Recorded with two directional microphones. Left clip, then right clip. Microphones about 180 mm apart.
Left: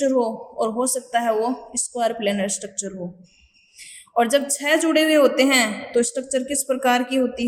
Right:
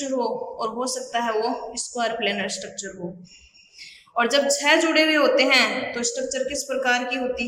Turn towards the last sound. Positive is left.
turn(degrees=45)  # may be behind; listen again after turning